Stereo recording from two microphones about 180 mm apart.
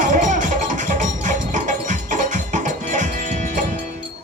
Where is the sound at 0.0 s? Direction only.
45° right (ahead or behind).